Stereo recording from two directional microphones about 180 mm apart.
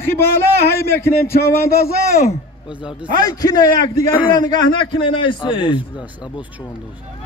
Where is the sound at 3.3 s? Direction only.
20° left (ahead or behind).